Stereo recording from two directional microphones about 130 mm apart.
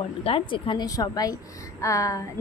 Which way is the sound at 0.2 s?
45° left (ahead or behind).